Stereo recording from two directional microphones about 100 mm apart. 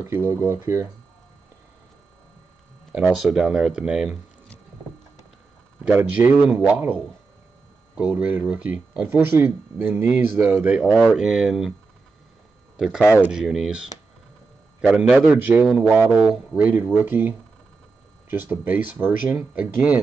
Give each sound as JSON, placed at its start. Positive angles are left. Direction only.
{"t": 0.0, "sound": "speech", "side_deg": -25}
{"t": 2.9, "sound": "a man's voice", "side_deg": -10}
{"t": 5.9, "sound": "a man's voice", "side_deg": -20}
{"t": 10.8, "sound": "speech", "side_deg": 0}
{"t": 12.7, "sound": "a man's voice", "side_deg": -5}